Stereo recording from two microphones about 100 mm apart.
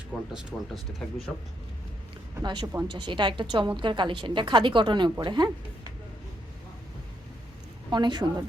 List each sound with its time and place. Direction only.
0.1 s speech: centre (ahead or behind)
2.4 s a woman's voice: 45° right (ahead or behind)
7.9 s a woman's voice: 45° right (ahead or behind)